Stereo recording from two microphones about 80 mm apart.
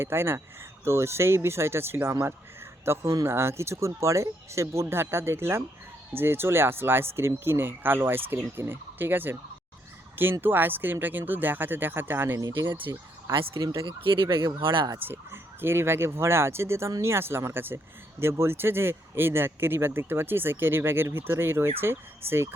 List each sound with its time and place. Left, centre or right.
0.0 s speech: right
10.4 s speech: right
13.8 s speech: right
14.9 s speech: right